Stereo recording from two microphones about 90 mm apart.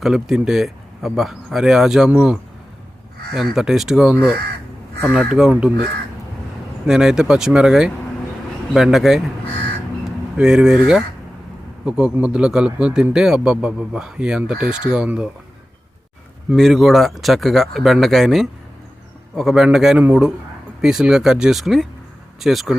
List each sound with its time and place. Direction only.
0.0 s speech: 5° right (ahead or behind)
2.0 s a man's voice: 15° right (ahead or behind)
3.3 s speech: centre (ahead or behind)
5.3 s a man's voice: 15° right (ahead or behind)
6.8 s a man's voice: 5° right (ahead or behind)
16.6 s speech: centre (ahead or behind)
20.0 s a man's voice: 15° right (ahead or behind)
20.8 s speech: 5° right (ahead or behind)